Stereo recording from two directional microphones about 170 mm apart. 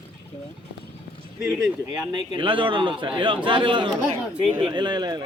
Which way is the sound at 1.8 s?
25° right (ahead or behind).